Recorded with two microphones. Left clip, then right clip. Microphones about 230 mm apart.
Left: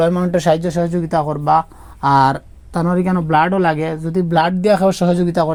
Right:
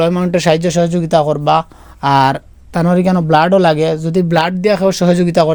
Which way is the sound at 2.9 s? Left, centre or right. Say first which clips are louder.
Right 4 dB; right.